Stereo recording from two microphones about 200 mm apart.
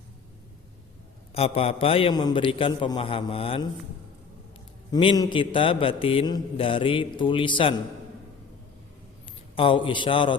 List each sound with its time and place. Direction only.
1.3 s a man's voice: 30° left (ahead or behind)
4.9 s a man's voice: 20° left (ahead or behind)
9.6 s a man's voice: 25° left (ahead or behind)